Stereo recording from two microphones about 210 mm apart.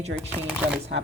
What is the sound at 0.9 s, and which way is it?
Speech, 60° right (ahead or behind).